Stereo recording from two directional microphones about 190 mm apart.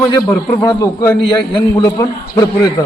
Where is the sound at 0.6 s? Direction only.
20° left (ahead or behind).